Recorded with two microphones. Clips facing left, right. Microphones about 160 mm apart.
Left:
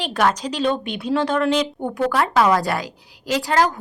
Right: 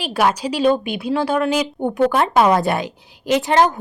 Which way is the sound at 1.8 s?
20° right (ahead or behind).